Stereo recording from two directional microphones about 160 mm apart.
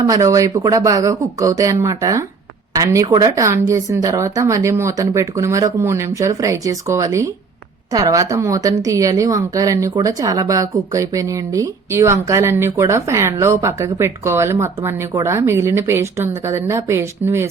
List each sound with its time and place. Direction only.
0.0 s a woman's voice: 20° right (ahead or behind)